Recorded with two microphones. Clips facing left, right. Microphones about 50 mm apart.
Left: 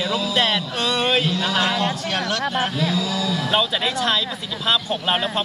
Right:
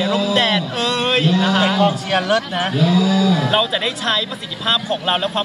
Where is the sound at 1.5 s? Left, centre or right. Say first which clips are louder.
Right 5 dB; centre.